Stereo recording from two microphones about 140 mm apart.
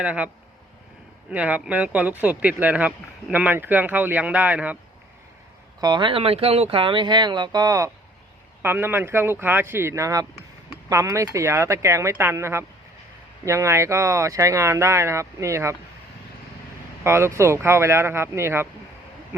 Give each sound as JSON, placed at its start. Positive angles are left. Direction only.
{"t": 0.0, "sound": "speech", "side_deg": -10}
{"t": 1.3, "sound": "speech", "side_deg": -10}
{"t": 5.8, "sound": "speech", "side_deg": -35}
{"t": 8.6, "sound": "speech", "side_deg": -15}
{"t": 17.0, "sound": "speech", "side_deg": -20}